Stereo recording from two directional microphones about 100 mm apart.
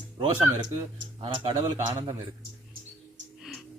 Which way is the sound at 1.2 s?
50° right (ahead or behind).